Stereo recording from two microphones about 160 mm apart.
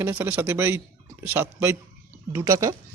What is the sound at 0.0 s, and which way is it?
A man's voice, 15° right (ahead or behind).